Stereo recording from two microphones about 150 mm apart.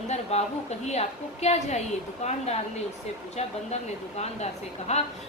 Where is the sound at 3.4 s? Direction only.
45° left (ahead or behind).